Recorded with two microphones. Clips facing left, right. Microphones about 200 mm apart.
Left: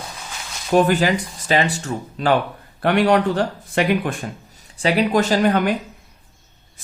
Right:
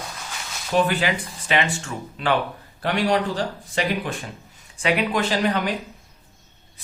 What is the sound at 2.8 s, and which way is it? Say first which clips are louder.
Speech: left 5 dB; 60° left (ahead or behind).